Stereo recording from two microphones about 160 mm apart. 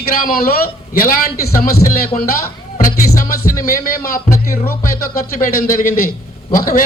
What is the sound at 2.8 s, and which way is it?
Music, 60° left (ahead or behind).